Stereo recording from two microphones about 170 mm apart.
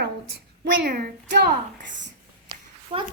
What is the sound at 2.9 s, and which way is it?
Speech, 35° right (ahead or behind).